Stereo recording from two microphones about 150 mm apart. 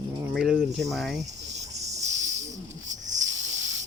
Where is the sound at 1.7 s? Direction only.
20° right (ahead or behind).